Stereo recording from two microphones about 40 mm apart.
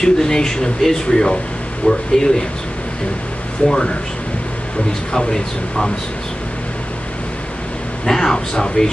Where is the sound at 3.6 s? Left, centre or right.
Left.